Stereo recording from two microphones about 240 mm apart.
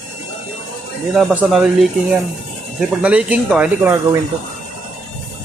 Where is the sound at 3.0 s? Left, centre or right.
Centre.